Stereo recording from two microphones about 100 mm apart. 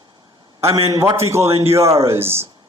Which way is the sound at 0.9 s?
30° right (ahead or behind).